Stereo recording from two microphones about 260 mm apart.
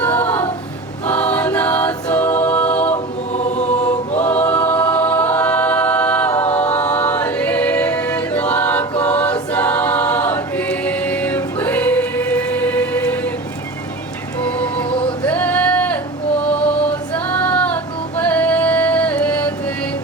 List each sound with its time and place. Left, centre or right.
0.0 s choir: centre
2.9 s choir: left
4.2 s a capella: centre
14.4 s choir: centre
16.4 s music: centre